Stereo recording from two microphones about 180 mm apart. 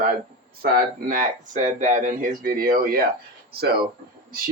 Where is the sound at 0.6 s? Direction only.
55° right (ahead or behind).